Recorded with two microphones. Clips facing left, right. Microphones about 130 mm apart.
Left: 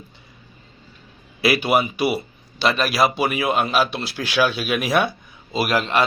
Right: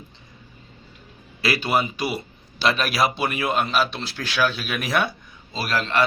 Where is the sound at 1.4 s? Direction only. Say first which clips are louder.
Left 4 dB; 15° left (ahead or behind).